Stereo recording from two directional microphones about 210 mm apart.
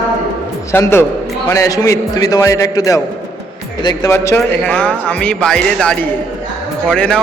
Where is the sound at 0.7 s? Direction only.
10° left (ahead or behind).